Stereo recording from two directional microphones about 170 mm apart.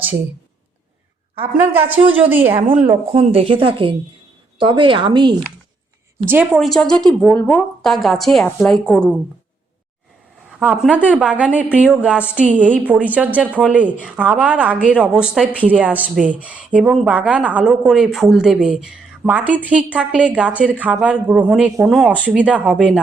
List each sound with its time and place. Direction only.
2.1 s a woman's voice: 10° right (ahead or behind)
2.5 s a woman's voice: 35° right (ahead or behind)
6.2 s a woman's voice: 10° right (ahead or behind)
10.6 s a woman's voice: 10° right (ahead or behind)